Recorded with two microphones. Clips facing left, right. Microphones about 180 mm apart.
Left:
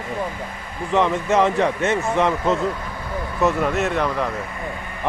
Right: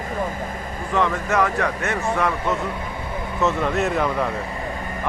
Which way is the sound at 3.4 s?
5° left (ahead or behind).